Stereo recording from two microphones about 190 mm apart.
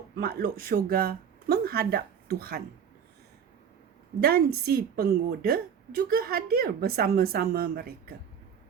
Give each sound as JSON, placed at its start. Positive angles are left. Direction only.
{"t": 0.2, "sound": "a woman's voice", "side_deg": -50}
{"t": 4.2, "sound": "a woman's voice", "side_deg": -55}